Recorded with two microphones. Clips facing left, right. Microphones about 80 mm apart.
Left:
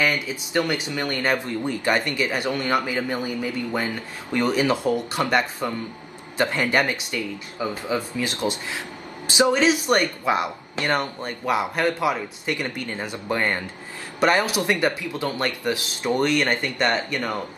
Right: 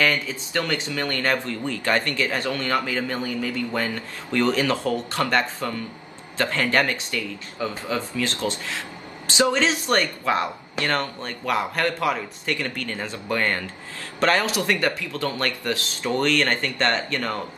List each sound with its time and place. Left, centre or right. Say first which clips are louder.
0.0 s speech: right 1 dB; centre